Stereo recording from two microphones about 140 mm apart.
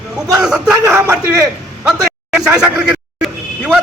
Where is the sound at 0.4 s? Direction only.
5° right (ahead or behind).